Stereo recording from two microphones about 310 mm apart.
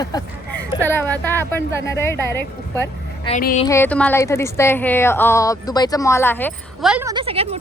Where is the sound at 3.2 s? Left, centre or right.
Left.